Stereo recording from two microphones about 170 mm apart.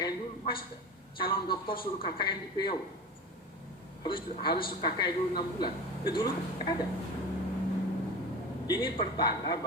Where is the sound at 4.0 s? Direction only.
30° left (ahead or behind).